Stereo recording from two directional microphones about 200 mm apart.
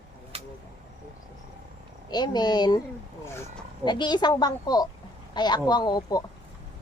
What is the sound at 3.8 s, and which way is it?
A woman's voice, 20° left (ahead or behind).